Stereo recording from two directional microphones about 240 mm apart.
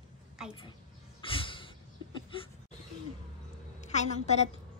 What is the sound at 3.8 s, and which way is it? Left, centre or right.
Speech, left.